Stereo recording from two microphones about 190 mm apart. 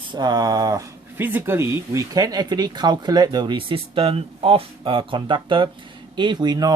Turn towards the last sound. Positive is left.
turn(degrees=-20)  # may be behind; listen again after turning